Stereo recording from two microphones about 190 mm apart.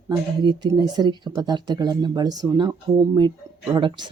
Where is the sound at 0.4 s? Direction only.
20° right (ahead or behind).